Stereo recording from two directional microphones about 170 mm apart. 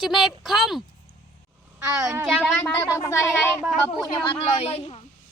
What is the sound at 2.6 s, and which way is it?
Speech, 20° left (ahead or behind).